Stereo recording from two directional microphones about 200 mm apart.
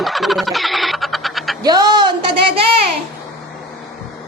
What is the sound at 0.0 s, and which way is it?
Music, centre (ahead or behind).